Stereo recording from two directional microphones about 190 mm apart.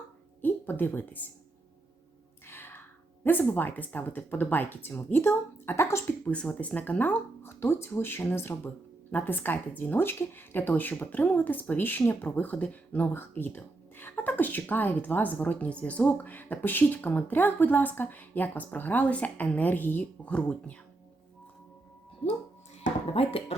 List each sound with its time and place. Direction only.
0.4 s speech: 10° left (ahead or behind)
2.5 s a sound: 10° left (ahead or behind)
3.2 s speech: 10° left (ahead or behind)
22.8 s speech: 35° left (ahead or behind)